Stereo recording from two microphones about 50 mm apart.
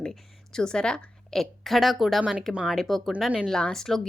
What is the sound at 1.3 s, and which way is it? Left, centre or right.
A woman's voice, centre.